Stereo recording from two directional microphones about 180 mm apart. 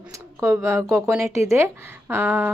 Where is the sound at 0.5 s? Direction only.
15° right (ahead or behind).